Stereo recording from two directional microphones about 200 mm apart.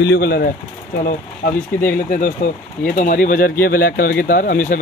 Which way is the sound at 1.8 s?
45° left (ahead or behind).